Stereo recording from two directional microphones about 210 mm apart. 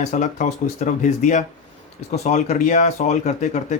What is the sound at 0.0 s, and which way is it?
Speech, 35° left (ahead or behind).